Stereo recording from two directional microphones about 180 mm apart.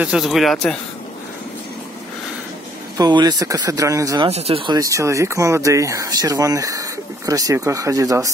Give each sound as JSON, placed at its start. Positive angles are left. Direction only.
{"t": 0.0, "sound": "speech", "side_deg": -5}
{"t": 3.0, "sound": "speech", "side_deg": -25}
{"t": 4.3, "sound": "speech", "side_deg": -35}